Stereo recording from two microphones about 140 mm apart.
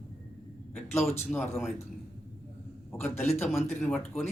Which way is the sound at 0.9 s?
15° left (ahead or behind).